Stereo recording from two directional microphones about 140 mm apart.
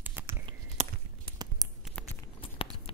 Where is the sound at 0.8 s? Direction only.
55° right (ahead or behind).